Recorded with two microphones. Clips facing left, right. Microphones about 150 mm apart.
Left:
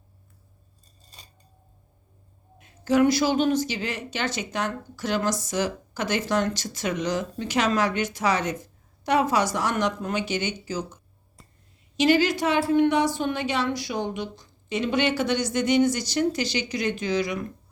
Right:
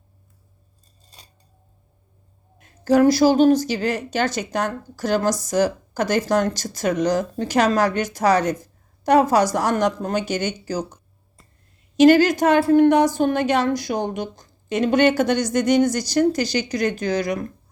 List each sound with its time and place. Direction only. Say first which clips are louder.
2.6 s speech: right 4 dB; 40° right (ahead or behind)
11.4 s a sound: left 2 dB; centre (ahead or behind)
11.9 s a woman's voice: right 7 dB; 45° right (ahead or behind)